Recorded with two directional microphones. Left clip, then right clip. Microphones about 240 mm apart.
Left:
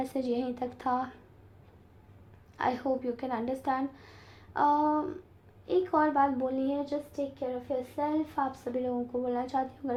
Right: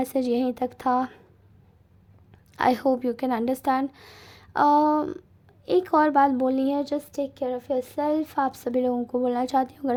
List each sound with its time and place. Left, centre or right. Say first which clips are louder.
0.0 s a woman's voice: right 7 dB; right
2.6 s a woman's voice: right 8 dB; right